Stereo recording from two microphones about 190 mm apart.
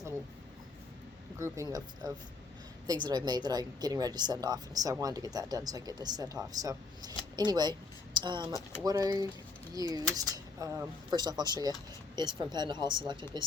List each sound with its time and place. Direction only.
1.4 s a woman's voice: 15° right (ahead or behind)